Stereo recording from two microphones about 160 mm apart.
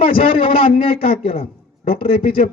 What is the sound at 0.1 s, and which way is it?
A man's voice, 35° left (ahead or behind).